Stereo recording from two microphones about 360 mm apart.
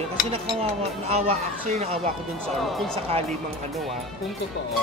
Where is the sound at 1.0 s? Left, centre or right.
Centre.